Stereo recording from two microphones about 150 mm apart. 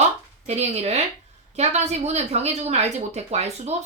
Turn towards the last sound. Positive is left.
turn(degrees=-45)  # may be behind; listen again after turning